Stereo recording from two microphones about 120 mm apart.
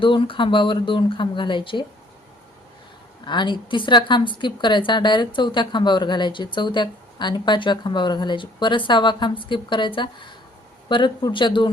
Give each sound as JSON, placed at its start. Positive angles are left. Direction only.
{"t": 0.0, "sound": "speech", "side_deg": 45}
{"t": 3.2, "sound": "a woman's voice", "side_deg": 40}